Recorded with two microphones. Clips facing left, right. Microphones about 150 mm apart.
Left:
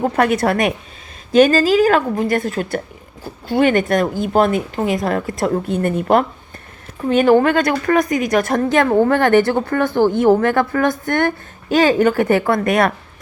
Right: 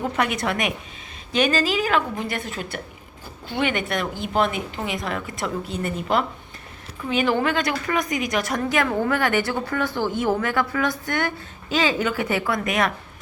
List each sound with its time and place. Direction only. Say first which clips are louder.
0.0 s a woman's voice: left 8 dB; 45° left (ahead or behind)
8.7 s a woman's voice: left 8 dB; 40° left (ahead or behind)